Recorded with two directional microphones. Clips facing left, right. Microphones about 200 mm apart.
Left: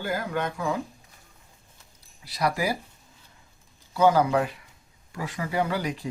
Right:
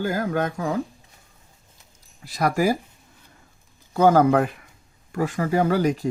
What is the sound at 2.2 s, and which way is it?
Speech, 50° right (ahead or behind).